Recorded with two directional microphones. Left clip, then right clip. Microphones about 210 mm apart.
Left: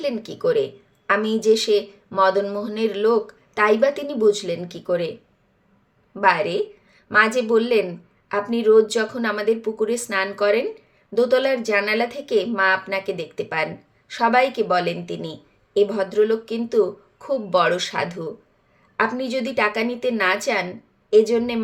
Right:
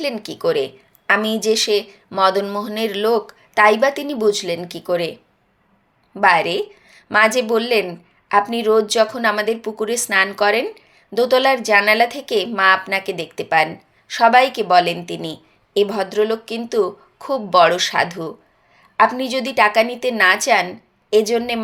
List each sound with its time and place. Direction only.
0.0 s speech: 5° left (ahead or behind)
6.1 s speech: 5° left (ahead or behind)